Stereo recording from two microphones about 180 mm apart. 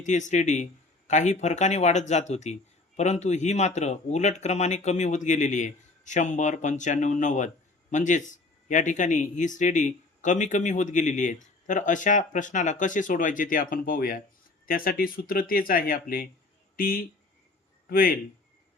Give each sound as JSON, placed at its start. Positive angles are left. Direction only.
{"t": 0.0, "sound": "a man's voice", "side_deg": 40}